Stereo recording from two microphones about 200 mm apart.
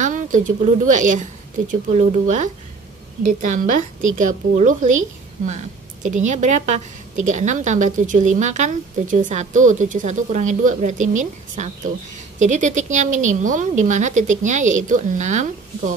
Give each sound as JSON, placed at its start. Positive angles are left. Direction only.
{"t": 0.0, "sound": "a woman's voice", "side_deg": -40}
{"t": 6.0, "sound": "speech", "side_deg": -35}